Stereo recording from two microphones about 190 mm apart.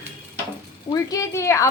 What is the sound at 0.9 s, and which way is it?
Speech, 15° left (ahead or behind).